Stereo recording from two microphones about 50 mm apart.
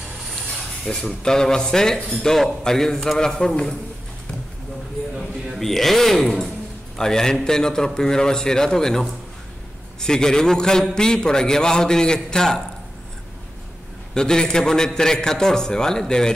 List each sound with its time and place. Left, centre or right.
0.9 s a man's voice: centre
5.6 s a man's voice: centre
14.1 s a man's voice: centre